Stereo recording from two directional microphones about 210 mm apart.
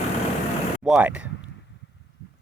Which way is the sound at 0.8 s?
5° right (ahead or behind).